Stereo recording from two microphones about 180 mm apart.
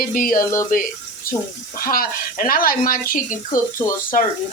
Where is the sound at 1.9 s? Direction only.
55° left (ahead or behind).